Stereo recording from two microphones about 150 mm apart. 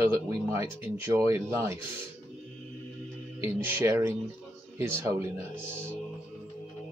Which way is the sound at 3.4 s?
15° right (ahead or behind).